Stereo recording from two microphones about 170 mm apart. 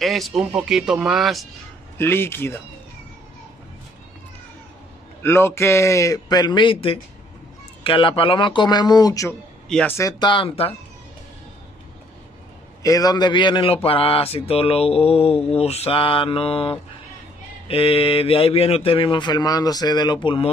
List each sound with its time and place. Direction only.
0.0 s speech: centre (ahead or behind)
2.0 s speech: 15° left (ahead or behind)
5.2 s a man's voice: 15° left (ahead or behind)
9.7 s speech: 5° left (ahead or behind)
9.9 s a man's voice: 25° left (ahead or behind)
12.8 s a man's voice: 20° left (ahead or behind)
13.8 s mantra: 35° left (ahead or behind)